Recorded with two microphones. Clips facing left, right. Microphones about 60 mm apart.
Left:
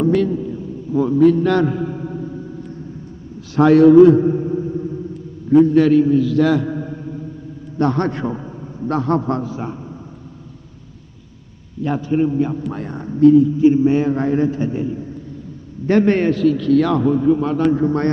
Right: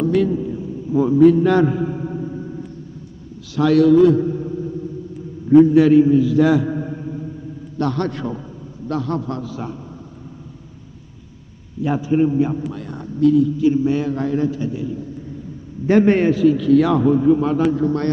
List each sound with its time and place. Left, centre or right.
0.1 s a sound: centre
3.5 s a man's voice: left
5.5 s a man's voice: centre
7.7 s a man's voice: left
11.8 s a man's voice: centre
12.7 s a man's voice: left
15.9 s a man's voice: centre
17.7 s a man's voice: left